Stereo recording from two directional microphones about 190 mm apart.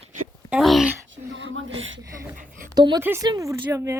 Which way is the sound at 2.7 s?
20° right (ahead or behind).